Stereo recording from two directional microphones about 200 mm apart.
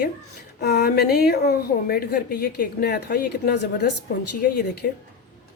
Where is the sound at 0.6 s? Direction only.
50° left (ahead or behind).